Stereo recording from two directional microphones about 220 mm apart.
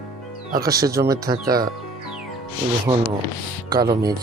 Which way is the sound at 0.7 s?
15° right (ahead or behind).